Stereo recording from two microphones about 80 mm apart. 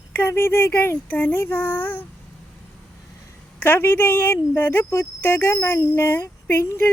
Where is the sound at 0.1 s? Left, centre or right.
Left.